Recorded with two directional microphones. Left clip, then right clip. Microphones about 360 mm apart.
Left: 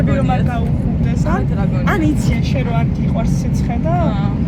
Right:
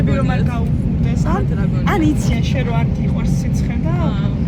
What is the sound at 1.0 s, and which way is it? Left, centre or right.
Speech, centre.